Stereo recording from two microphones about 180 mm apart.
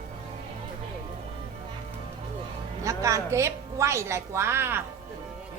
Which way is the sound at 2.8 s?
20° right (ahead or behind).